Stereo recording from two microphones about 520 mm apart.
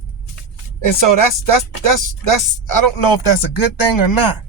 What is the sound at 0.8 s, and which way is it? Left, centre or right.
Speech, left.